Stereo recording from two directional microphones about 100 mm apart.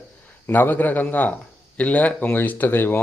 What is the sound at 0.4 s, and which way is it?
A man's voice, 20° left (ahead or behind).